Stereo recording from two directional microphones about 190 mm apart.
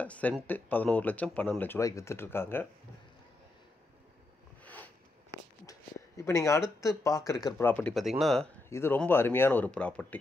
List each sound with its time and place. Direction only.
0.0 s speech: 5° left (ahead or behind)
4.6 s zipper: 10° left (ahead or behind)
6.8 s speech: 15° left (ahead or behind); by 8.5 s centre (ahead or behind)
8.6 s speech: 15° left (ahead or behind)